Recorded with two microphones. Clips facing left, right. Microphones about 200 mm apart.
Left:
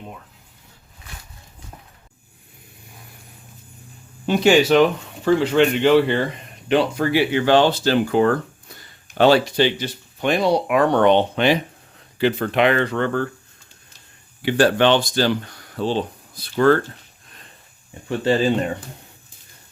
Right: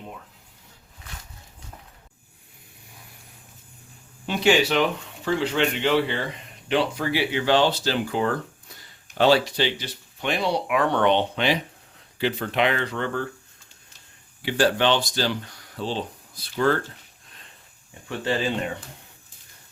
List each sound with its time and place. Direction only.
4.3 s speech: 45° left (ahead or behind)
14.4 s speech: 55° left (ahead or behind)
18.3 s speech: 40° left (ahead or behind)